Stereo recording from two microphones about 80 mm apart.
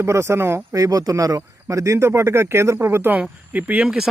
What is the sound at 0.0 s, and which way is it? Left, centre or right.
Speech, right.